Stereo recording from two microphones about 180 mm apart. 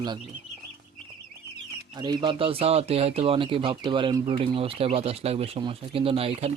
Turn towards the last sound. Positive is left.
turn(degrees=-35)  # may be behind; listen again after turning